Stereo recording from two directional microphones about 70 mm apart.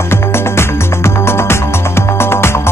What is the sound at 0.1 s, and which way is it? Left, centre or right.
Music, left.